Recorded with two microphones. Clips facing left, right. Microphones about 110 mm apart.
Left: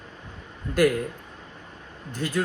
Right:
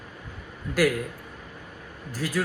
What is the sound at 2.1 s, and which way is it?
Speech, 5° right (ahead or behind).